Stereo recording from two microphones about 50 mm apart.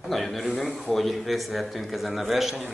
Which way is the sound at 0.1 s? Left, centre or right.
Centre.